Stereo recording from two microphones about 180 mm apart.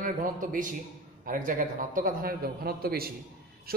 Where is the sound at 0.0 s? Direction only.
50° right (ahead or behind).